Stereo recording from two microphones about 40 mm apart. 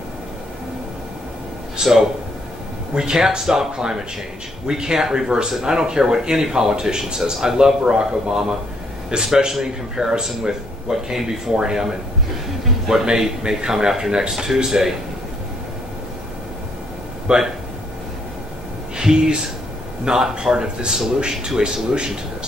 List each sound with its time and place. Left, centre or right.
1.8 s a man's voice: centre
17.3 s speech: right
18.9 s a man's voice: centre